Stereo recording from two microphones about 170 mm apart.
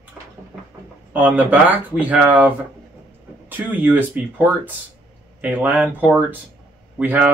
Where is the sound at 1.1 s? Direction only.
10° right (ahead or behind).